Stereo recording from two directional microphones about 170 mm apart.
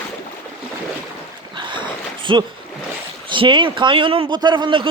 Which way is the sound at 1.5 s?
30° right (ahead or behind).